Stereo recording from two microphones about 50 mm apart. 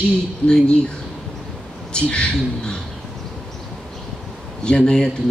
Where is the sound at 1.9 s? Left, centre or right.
Centre.